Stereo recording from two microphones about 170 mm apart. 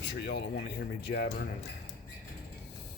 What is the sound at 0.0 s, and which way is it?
Speech, 85° left.